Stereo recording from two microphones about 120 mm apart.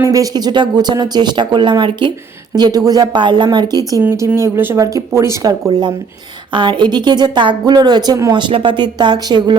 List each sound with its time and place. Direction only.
0.0 s speech: 30° right (ahead or behind)
4.0 s speech: 15° right (ahead or behind)
6.5 s speech: 40° right (ahead or behind)